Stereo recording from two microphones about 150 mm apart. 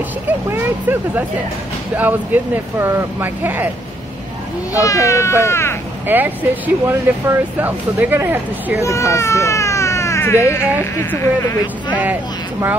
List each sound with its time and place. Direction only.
0.3 s speech: 10° right (ahead or behind)
4.7 s speech: 20° left (ahead or behind)
6.0 s speech: 10° right (ahead or behind)
8.8 s speech: 20° left (ahead or behind)
12.0 s speech: 10° right (ahead or behind)